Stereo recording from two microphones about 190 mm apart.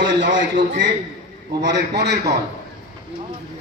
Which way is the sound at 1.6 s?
60° right (ahead or behind).